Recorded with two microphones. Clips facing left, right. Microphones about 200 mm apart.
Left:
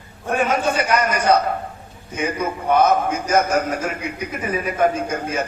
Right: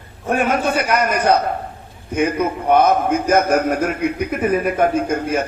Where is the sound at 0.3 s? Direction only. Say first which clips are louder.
Right 1 dB; 55° right (ahead or behind).